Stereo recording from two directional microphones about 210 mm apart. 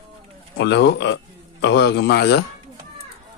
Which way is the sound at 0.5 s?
55° left (ahead or behind).